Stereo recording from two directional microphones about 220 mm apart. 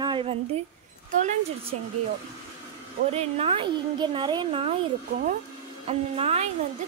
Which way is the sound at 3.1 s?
25° right (ahead or behind).